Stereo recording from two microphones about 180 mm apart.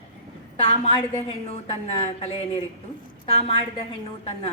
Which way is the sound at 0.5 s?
30° left (ahead or behind).